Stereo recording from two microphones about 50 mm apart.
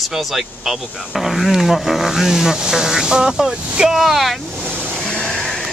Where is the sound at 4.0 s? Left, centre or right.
Centre.